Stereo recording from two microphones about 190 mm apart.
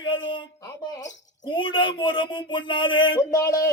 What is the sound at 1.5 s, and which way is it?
A man's voice, 25° left (ahead or behind).